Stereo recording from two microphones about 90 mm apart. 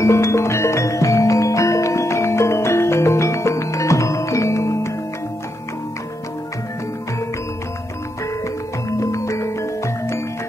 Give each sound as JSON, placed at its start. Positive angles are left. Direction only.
{"t": 0.0, "sound": "music", "side_deg": 30}
{"t": 8.8, "sound": "music", "side_deg": 35}